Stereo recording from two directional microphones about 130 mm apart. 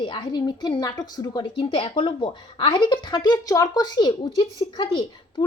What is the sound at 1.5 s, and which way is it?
A woman's voice, 45° left (ahead or behind).